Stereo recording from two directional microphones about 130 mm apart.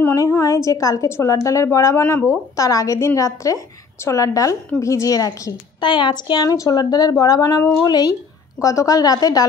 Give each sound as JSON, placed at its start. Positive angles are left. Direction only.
{"t": 0.0, "sound": "a woman's voice", "side_deg": 25}